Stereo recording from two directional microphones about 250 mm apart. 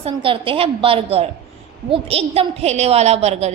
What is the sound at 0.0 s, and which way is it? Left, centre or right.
A woman's voice, right.